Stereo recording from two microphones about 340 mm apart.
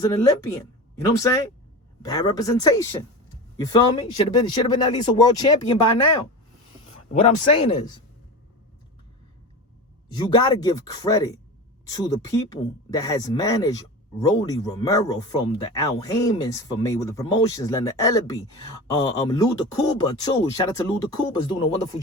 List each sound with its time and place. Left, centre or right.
0.0 s speech: centre
7.1 s speech: centre
10.3 s speech: centre